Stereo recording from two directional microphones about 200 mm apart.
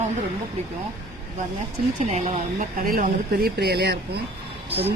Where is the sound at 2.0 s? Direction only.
35° right (ahead or behind); by 4.0 s 55° right (ahead or behind).